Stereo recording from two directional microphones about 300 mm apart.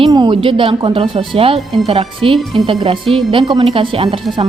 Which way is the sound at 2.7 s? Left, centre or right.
Centre.